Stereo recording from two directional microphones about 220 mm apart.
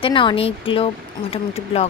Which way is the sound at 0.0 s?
20° left (ahead or behind).